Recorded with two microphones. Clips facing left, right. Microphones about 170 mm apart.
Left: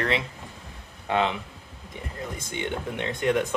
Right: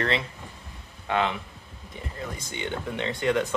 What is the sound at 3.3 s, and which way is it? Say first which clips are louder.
Speech: left 1 dB; 15° left (ahead or behind).